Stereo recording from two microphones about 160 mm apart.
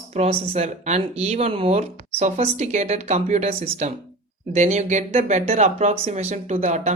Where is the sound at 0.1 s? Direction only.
40° right (ahead or behind).